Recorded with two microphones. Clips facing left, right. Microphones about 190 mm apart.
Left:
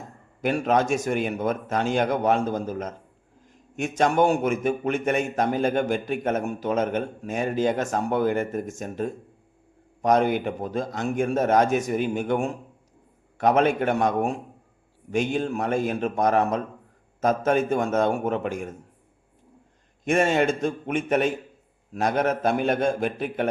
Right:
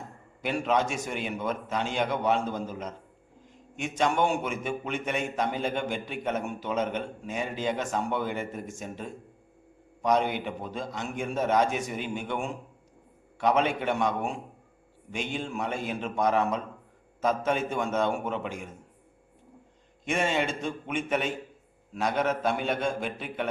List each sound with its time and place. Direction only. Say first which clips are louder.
0.4 s speech: left 5 dB; 45° left (ahead or behind)
20.1 s speech: left 7 dB; 45° left (ahead or behind)
21.9 s speech: left 4 dB; 45° left (ahead or behind)